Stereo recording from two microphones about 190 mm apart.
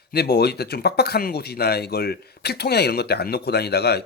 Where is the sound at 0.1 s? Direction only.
55° left (ahead or behind).